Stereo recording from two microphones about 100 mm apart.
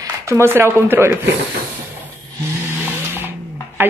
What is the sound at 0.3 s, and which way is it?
Speech, 25° right (ahead or behind).